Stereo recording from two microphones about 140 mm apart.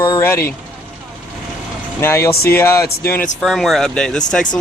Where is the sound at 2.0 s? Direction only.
20° left (ahead or behind).